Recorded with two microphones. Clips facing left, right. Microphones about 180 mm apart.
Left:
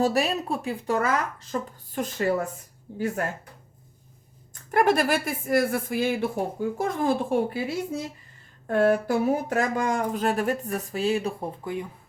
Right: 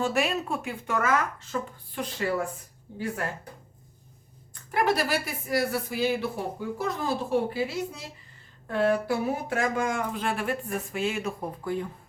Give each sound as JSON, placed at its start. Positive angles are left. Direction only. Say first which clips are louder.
{"t": 0.0, "sound": "speech", "louder": "left 3 dB", "side_deg": 35}
{"t": 2.0, "sound": "a woman's voice", "louder": "left 3 dB", "side_deg": 45}
{"t": 4.7, "sound": "a woman's voice", "louder": "left 4 dB", "side_deg": 50}
{"t": 11.6, "sound": "speech", "louder": "right 2 dB", "side_deg": 15}